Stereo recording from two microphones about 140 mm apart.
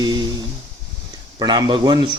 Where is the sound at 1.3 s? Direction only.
35° right (ahead or behind).